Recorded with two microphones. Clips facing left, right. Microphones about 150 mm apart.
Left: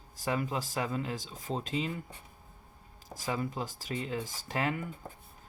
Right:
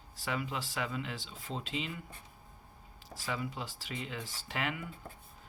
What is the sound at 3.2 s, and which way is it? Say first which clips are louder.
Speech: left 4 dB; 45° left (ahead or behind).